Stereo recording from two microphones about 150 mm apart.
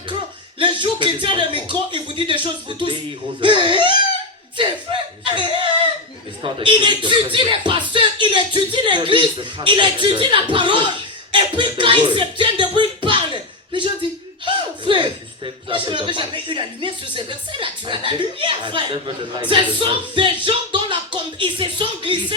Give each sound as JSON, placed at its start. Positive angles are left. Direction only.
{"t": 0.6, "sound": "speech", "side_deg": -30}
{"t": 4.9, "sound": "chuckle", "side_deg": -35}
{"t": 5.2, "sound": "speech", "side_deg": -30}